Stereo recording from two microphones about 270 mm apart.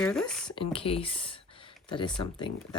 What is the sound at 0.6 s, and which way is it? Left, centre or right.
Speech, left.